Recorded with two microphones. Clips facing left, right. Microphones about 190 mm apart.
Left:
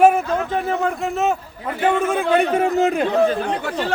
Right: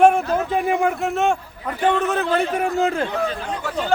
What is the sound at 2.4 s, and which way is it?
Speech, 20° left (ahead or behind).